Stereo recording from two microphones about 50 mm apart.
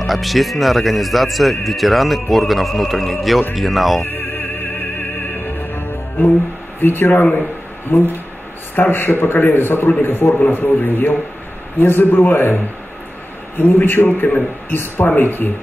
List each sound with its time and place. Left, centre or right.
0.0 s speech: centre
4.0 s opera: left
5.3 s music: left
6.8 s a man's voice: left
13.6 s a man's voice: left